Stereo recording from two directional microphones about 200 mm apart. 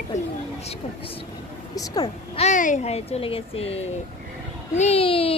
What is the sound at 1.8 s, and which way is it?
Speech, 20° left (ahead or behind).